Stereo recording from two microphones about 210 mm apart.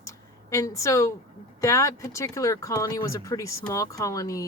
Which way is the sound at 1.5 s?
15° left (ahead or behind).